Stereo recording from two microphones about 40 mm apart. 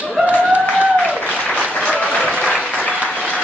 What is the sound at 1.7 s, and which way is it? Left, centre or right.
Applause, left.